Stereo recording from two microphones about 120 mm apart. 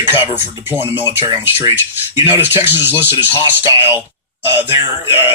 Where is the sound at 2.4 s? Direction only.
20° right (ahead or behind).